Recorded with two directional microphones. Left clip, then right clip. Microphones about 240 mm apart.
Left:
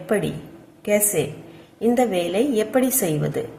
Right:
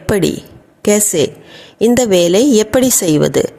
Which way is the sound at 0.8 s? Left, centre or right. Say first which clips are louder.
Right 8 dB; right.